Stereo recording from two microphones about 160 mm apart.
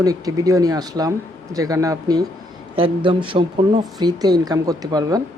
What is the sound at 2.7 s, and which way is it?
Speech, 30° right (ahead or behind).